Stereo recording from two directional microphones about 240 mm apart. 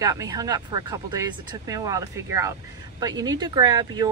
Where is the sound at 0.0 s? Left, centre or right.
Centre.